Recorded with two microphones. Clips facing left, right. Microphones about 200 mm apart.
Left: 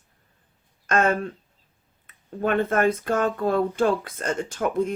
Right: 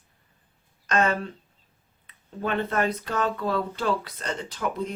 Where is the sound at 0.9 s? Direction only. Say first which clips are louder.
Left 2 dB; 50° left (ahead or behind).